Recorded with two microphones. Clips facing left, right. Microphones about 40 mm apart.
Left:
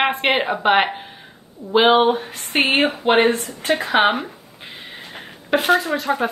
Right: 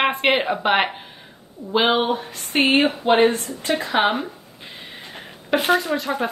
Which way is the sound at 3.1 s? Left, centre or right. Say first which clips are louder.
Left 1 dB; left.